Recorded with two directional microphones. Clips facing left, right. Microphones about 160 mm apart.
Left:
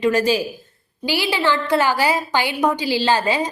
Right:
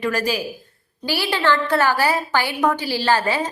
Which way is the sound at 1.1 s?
15° left (ahead or behind).